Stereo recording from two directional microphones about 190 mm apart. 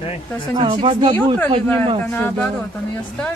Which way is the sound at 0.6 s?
25° right (ahead or behind).